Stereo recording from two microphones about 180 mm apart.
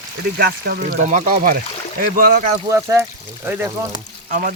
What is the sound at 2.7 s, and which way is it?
Speech, 15° right (ahead or behind).